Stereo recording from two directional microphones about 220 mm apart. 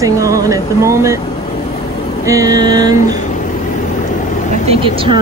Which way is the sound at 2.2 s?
15° right (ahead or behind).